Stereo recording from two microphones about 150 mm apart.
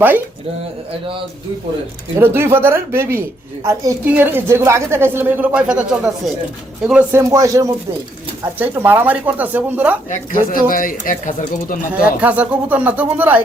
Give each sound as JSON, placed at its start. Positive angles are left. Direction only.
{"t": 2.1, "sound": "speech", "side_deg": -15}
{"t": 7.2, "sound": "speech", "side_deg": -20}
{"t": 10.1, "sound": "speech", "side_deg": 65}
{"t": 11.9, "sound": "speech", "side_deg": -10}